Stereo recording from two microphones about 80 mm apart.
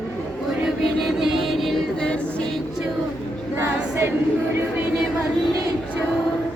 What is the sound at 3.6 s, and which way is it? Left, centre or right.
Choir, right.